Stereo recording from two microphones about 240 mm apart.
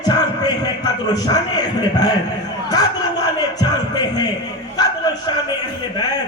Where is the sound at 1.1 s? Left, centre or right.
Centre.